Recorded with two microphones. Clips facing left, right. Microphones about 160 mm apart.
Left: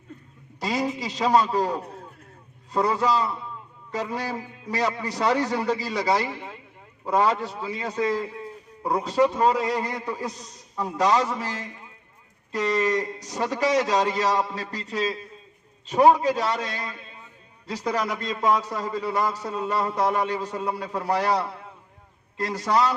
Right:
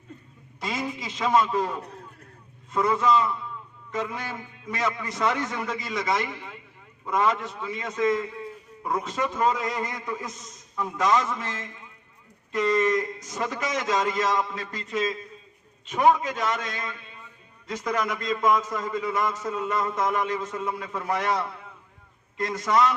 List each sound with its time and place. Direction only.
0.6 s a man's voice: 35° left (ahead or behind)